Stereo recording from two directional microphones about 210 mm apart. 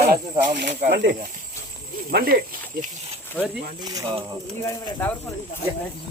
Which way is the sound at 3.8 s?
20° right (ahead or behind).